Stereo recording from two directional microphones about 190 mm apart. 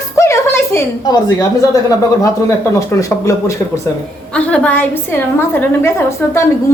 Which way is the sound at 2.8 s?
15° left (ahead or behind).